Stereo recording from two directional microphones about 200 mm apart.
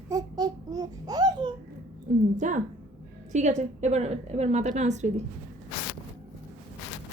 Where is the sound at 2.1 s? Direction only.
40° right (ahead or behind).